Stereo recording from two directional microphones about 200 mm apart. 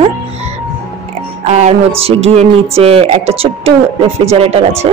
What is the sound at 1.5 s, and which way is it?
Speech, 35° right (ahead or behind).